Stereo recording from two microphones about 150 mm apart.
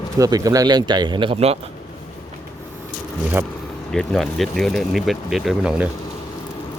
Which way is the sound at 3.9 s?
Centre (ahead or behind).